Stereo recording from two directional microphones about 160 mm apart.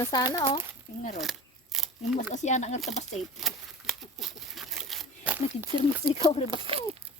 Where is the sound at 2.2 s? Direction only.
50° left (ahead or behind).